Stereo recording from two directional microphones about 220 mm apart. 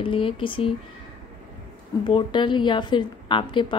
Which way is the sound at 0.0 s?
25° left (ahead or behind).